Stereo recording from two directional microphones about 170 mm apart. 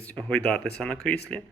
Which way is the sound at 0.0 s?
10° left (ahead or behind).